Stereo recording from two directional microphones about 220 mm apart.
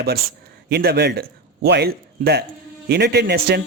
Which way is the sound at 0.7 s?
50° right (ahead or behind).